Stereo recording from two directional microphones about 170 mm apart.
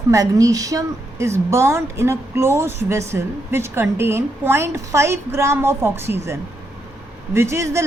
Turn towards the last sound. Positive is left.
turn(degrees=-15)  # may be behind; listen again after turning